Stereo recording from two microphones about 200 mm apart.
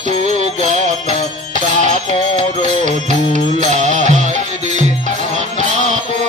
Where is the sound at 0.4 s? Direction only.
35° right (ahead or behind).